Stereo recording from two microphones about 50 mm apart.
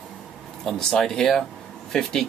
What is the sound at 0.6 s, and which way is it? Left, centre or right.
Speech, centre.